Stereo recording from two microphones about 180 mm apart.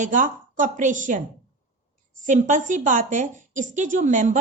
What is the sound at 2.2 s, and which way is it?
A woman's voice, 45° right (ahead or behind).